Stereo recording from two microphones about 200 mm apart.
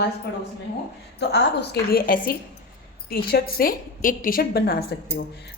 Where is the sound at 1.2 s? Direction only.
55° left (ahead or behind).